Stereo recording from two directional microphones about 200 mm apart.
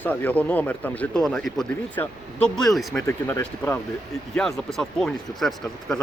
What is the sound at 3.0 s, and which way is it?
Speech, 10° left (ahead or behind).